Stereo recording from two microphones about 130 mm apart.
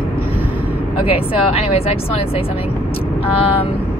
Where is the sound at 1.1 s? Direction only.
50° left (ahead or behind).